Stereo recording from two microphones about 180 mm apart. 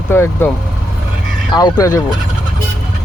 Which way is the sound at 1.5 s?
20° left (ahead or behind).